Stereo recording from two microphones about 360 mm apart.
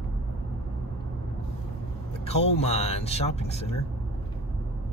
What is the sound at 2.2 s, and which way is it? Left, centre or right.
Speech, centre.